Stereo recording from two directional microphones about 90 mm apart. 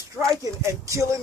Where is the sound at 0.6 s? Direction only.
35° right (ahead or behind).